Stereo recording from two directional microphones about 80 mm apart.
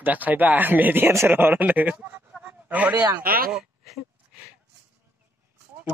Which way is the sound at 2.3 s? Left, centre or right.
Centre.